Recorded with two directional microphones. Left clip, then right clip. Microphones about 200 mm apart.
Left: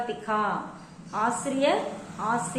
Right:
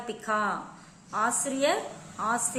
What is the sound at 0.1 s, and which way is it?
A woman's voice, 35° right (ahead or behind).